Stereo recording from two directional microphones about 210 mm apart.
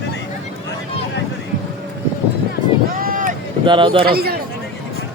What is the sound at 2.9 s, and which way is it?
Boat, 40° right (ahead or behind).